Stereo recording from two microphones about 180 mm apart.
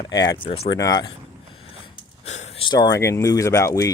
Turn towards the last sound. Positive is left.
turn(degrees=15)  # may be behind; listen again after turning